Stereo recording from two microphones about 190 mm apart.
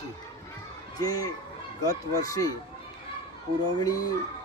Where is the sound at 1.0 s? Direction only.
20° left (ahead or behind).